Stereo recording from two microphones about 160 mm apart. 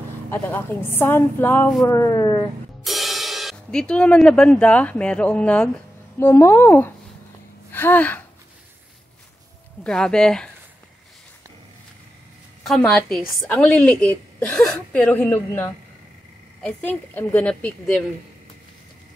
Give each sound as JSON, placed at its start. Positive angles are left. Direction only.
{"t": 0.3, "sound": "a woman's voice", "side_deg": 15}
{"t": 2.8, "sound": "a woman's voice", "side_deg": 0}
{"t": 9.8, "sound": "a woman's voice", "side_deg": 5}
{"t": 12.6, "sound": "a woman's voice", "side_deg": 5}